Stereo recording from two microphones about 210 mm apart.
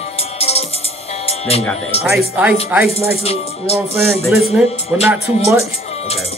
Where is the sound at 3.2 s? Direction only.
30° left (ahead or behind).